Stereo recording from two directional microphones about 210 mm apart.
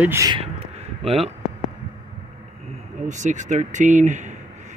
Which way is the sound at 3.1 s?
35° right (ahead or behind).